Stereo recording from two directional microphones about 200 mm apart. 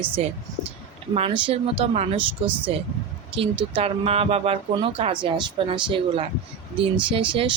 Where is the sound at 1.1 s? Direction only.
30° right (ahead or behind).